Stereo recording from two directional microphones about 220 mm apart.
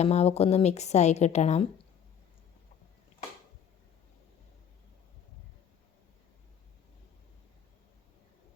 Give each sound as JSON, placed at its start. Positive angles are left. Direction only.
{"t": 0.0, "sound": "a woman's voice", "side_deg": 30}